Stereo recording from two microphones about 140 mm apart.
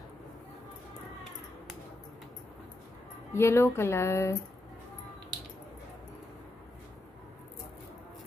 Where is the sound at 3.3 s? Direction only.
20° left (ahead or behind).